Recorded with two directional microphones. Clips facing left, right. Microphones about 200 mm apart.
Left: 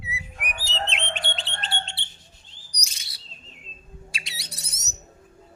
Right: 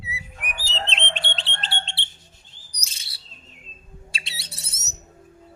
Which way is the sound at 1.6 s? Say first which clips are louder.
Left 2 dB; 30° right (ahead or behind).